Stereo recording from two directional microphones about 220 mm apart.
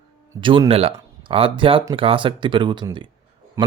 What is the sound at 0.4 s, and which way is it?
Speech, 20° right (ahead or behind).